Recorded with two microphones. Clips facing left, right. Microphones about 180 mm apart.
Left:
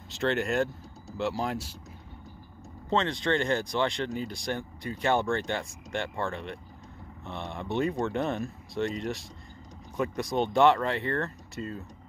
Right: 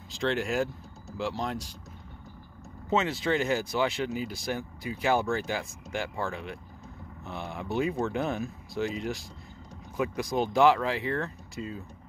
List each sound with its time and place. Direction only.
0.1 s speech: centre (ahead or behind)
2.9 s speech: 5° right (ahead or behind)